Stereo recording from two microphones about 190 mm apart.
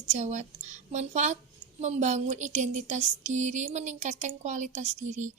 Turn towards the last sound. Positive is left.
turn(degrees=-40)  # may be behind; listen again after turning